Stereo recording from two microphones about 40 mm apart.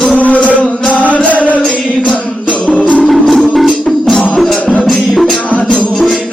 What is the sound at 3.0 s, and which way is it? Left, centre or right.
Music, centre.